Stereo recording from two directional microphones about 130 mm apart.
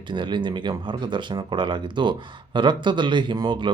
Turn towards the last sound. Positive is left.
turn(degrees=-35)  # may be behind; listen again after turning